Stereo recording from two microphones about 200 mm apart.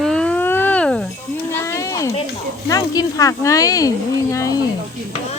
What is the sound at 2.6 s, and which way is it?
Speech, 20° left (ahead or behind).